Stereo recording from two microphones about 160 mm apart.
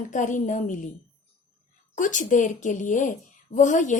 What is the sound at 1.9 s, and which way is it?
A woman's voice, 50° left (ahead or behind).